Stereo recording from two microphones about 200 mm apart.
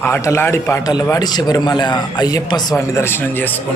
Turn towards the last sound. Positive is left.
turn(degrees=10)  # may be behind; listen again after turning